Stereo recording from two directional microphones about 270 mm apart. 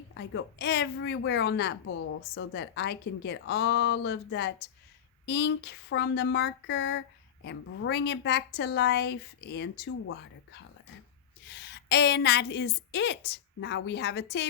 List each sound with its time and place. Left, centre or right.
0.1 s a woman's voice: left
11.4 s a woman's voice: left